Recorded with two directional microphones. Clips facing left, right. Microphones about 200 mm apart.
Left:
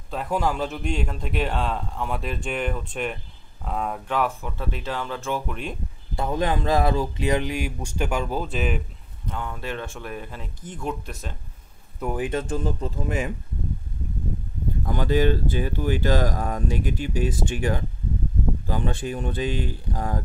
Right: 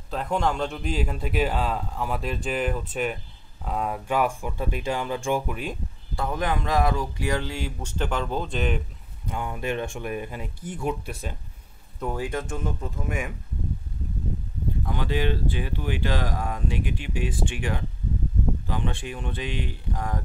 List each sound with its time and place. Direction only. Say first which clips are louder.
0.1 s speech: even; 5° left (ahead or behind)
6.1 s speech: left 3 dB; 25° left (ahead or behind); by 8.8 s 5° left (ahead or behind)
9.3 s speech: right 3 dB; 15° right (ahead or behind)
12.0 s speech: left 2 dB; 15° left (ahead or behind)
12.3 s speech: left 4 dB; 30° left (ahead or behind)
14.9 s speech: left 6 dB; 45° left (ahead or behind)